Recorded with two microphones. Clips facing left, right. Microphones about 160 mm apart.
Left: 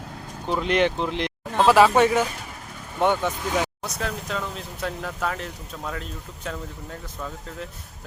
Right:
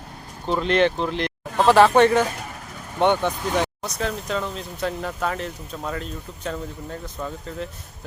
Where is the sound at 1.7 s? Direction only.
5° left (ahead or behind).